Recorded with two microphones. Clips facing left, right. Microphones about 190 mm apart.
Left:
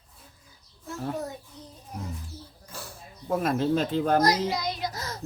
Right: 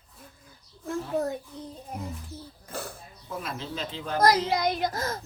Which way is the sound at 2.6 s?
60° right (ahead or behind).